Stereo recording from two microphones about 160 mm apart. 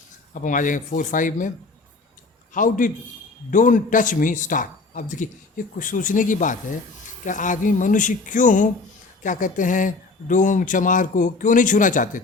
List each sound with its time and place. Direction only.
0.4 s speech: 55° left (ahead or behind)
2.5 s a man's voice: 55° left (ahead or behind)